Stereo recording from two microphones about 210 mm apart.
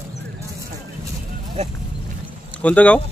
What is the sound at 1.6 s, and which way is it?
Speech, 30° right (ahead or behind).